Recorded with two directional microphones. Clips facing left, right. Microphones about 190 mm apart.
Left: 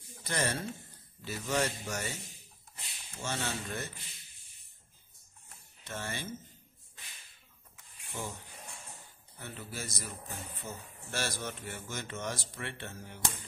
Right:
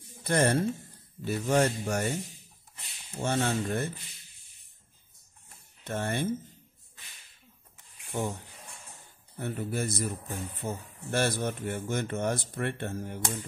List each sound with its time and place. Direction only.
0.2 s speech: 55° right (ahead or behind)
3.2 s speech: 60° right (ahead or behind)
5.9 s speech: 55° right (ahead or behind)
8.1 s speech: 60° right (ahead or behind)
9.4 s speech: 55° right (ahead or behind)